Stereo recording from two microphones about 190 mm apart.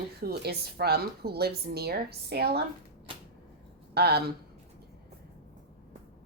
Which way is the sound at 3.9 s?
60° right (ahead or behind).